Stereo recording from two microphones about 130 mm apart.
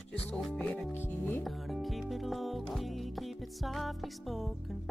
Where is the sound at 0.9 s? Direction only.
15° left (ahead or behind).